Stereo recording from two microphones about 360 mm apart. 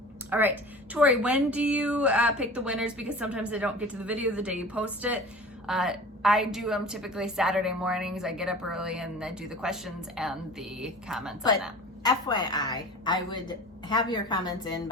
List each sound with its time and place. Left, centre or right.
0.3 s a woman's voice: centre
12.0 s a woman's voice: centre